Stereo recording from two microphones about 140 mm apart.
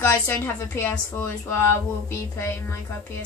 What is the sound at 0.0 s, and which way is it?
A woman's voice, 20° left (ahead or behind).